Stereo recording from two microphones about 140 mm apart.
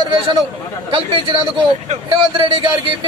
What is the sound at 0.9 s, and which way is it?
Speech, 40° right (ahead or behind).